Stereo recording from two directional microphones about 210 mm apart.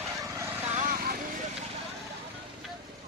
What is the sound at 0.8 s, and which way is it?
Vehicle, 40° right (ahead or behind).